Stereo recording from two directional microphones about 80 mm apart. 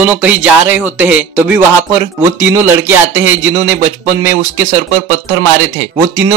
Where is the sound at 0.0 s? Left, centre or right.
Right.